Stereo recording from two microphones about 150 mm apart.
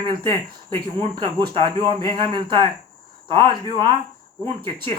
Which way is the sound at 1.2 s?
35° right (ahead or behind).